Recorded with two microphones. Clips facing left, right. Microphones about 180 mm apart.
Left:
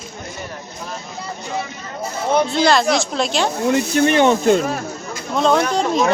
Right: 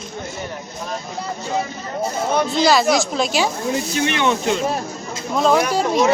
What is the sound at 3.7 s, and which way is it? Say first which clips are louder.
Speech: left 5 dB; 65° left (ahead or behind).